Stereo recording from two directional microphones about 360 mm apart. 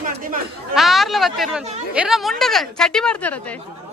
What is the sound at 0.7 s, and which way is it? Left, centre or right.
Speech, centre.